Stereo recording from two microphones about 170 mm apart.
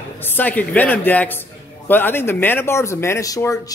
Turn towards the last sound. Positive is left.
turn(degrees=20)  # may be behind; listen again after turning